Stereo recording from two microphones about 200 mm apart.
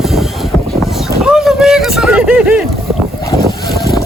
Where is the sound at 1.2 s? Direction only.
Centre (ahead or behind).